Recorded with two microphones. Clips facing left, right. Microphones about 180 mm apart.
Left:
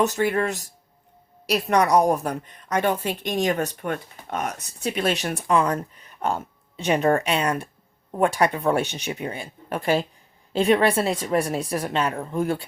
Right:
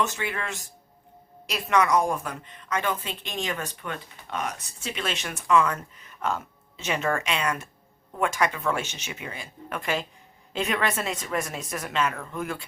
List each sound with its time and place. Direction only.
0.0 s speech: 40° left (ahead or behind)